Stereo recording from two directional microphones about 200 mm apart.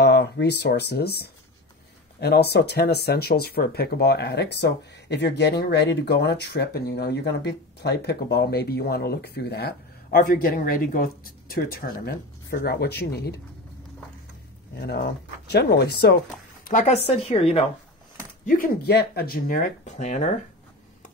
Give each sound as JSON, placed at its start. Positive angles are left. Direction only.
{"t": 0.0, "sound": "speech", "side_deg": 55}
{"t": 14.8, "sound": "speech", "side_deg": 50}
{"t": 16.6, "sound": "speech", "side_deg": 40}
{"t": 18.4, "sound": "speech", "side_deg": 45}